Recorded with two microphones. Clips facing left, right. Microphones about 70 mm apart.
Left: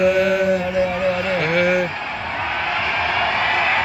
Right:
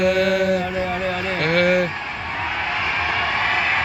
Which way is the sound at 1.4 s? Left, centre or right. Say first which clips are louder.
Right 3 dB; right.